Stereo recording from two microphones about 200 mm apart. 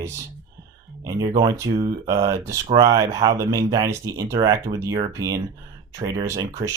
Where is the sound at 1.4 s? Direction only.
20° right (ahead or behind).